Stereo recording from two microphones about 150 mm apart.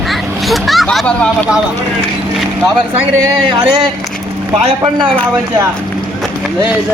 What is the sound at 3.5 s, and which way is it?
Speech, 30° right (ahead or behind).